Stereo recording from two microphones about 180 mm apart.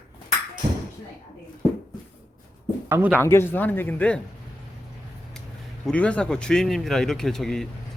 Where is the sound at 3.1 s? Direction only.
15° left (ahead or behind).